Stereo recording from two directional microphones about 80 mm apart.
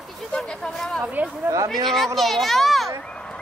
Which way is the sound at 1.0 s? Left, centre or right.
Centre.